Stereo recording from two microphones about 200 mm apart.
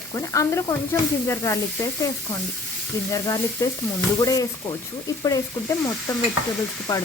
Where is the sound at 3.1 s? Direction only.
15° left (ahead or behind).